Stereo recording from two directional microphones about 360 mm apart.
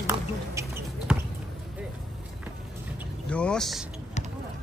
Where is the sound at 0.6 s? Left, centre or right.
Centre.